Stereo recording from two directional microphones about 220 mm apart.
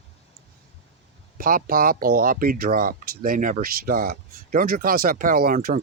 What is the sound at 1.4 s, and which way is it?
Speech, 40° right (ahead or behind).